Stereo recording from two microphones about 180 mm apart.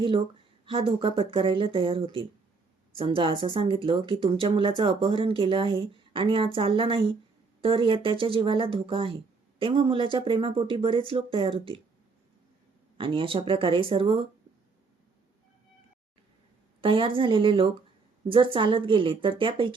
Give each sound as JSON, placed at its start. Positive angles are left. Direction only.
{"t": 0.0, "sound": "a woman's voice", "side_deg": -30}
{"t": 13.0, "sound": "a woman's voice", "side_deg": -30}
{"t": 16.8, "sound": "a woman's voice", "side_deg": -30}